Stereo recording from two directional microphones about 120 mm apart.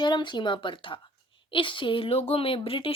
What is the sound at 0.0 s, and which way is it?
A woman's voice, 40° left (ahead or behind).